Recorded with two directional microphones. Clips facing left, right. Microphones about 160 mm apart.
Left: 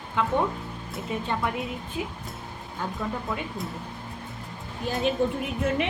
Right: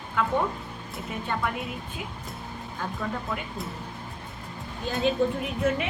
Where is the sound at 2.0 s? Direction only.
25° left (ahead or behind).